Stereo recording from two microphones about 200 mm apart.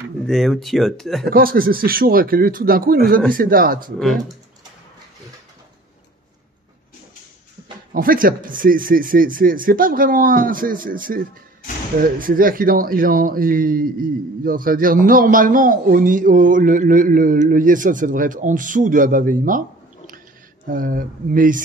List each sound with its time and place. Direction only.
0.2 s speech: centre (ahead or behind)
1.3 s speech: 45° right (ahead or behind)
7.9 s speech: 45° right (ahead or behind)
20.6 s speech: 45° right (ahead or behind)